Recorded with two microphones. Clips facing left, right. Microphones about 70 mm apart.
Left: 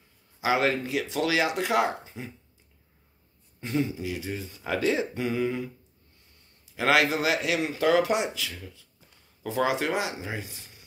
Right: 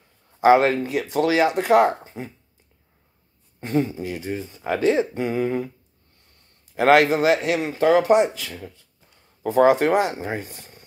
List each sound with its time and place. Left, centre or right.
0.4 s speech: right
3.6 s speech: right
6.7 s speech: right